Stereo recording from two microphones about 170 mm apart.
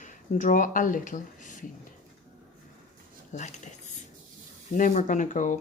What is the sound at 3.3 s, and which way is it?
Speech, 45° left (ahead or behind).